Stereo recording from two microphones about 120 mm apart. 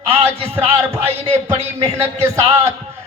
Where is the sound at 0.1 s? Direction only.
55° right (ahead or behind).